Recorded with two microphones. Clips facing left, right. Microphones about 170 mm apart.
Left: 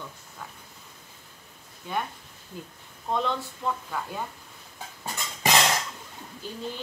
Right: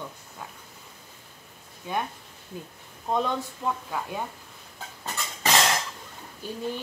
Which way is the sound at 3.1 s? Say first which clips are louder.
Right 1 dB; 10° right (ahead or behind).